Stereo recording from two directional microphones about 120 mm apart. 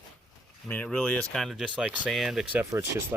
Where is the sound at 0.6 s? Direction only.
10° left (ahead or behind).